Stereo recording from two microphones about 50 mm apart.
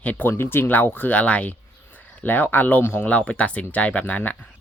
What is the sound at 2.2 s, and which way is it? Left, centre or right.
Speech, left.